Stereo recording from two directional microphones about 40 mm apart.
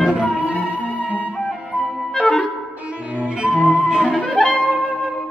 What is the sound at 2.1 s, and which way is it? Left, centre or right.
Music, left.